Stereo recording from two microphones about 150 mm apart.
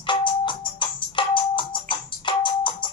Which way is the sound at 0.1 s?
35° left (ahead or behind).